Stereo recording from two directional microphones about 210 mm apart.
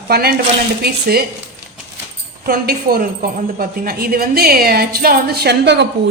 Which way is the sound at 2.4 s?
45° right (ahead or behind).